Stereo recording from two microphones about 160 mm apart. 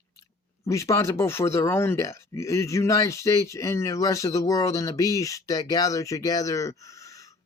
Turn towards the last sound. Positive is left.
turn(degrees=20)  # may be behind; listen again after turning